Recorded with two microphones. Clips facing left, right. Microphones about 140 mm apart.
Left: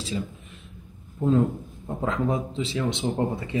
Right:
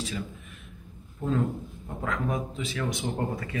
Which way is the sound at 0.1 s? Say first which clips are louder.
Left 4 dB; 25° left (ahead or behind).